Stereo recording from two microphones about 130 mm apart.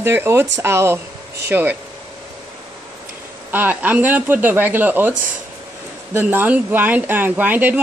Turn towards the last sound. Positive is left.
turn(degrees=-15)  # may be behind; listen again after turning